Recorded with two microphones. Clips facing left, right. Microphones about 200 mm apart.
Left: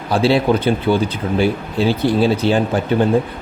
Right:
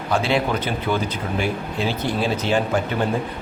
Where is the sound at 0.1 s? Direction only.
35° left (ahead or behind).